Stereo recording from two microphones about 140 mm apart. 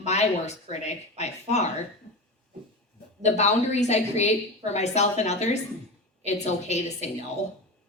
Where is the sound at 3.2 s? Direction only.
55° left (ahead or behind).